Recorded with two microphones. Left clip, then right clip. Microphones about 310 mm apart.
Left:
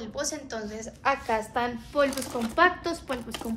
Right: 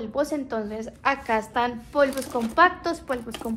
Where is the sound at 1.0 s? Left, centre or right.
Right.